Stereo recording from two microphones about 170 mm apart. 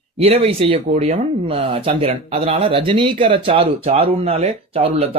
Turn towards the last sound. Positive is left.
turn(degrees=-35)  # may be behind; listen again after turning